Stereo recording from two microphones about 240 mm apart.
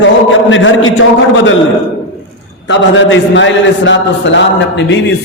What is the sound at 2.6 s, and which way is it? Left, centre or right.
A man's voice, left.